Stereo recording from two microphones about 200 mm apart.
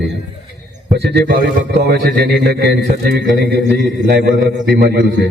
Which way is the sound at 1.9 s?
55° right (ahead or behind).